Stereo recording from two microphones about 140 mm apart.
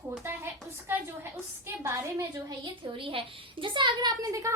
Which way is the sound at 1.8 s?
20° right (ahead or behind).